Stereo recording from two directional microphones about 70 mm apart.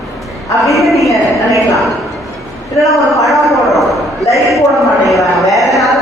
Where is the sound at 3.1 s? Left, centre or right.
Centre.